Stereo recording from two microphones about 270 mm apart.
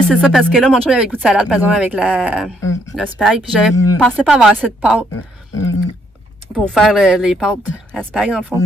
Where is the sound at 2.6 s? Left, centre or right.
Centre.